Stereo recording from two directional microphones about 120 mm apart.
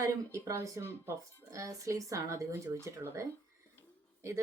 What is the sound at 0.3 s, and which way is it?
Speech, 25° right (ahead or behind).